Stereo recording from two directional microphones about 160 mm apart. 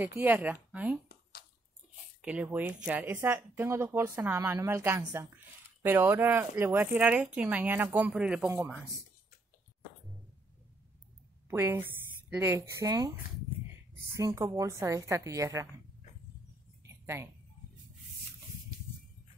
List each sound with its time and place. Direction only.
0.0 s speech: 10° right (ahead or behind)
2.2 s speech: 10° right (ahead or behind)
11.4 s a woman's voice: 15° right (ahead or behind)
14.1 s a woman's voice: 20° right (ahead or behind)
16.8 s a sound: 15° right (ahead or behind)